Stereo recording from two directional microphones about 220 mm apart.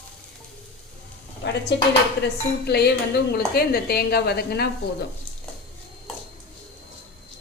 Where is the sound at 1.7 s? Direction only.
50° left (ahead or behind).